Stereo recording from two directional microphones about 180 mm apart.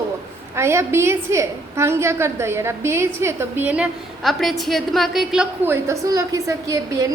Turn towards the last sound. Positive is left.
turn(degrees=-15)  # may be behind; listen again after turning